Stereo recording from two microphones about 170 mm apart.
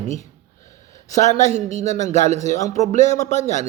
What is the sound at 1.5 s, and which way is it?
Speech, 40° right (ahead or behind).